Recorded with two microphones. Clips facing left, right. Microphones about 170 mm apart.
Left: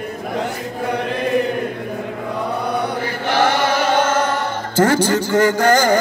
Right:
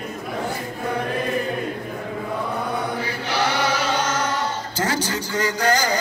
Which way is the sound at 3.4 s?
60° left (ahead or behind).